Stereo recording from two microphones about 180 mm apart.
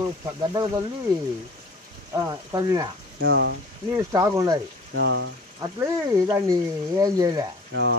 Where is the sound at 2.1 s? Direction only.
20° right (ahead or behind).